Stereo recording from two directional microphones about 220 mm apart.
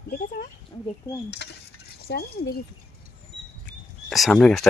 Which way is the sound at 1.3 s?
50° left (ahead or behind).